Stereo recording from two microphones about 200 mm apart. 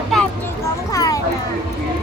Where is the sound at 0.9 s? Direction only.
15° left (ahead or behind).